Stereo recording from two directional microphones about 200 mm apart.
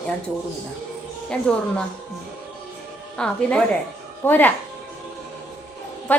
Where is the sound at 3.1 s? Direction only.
5° left (ahead or behind).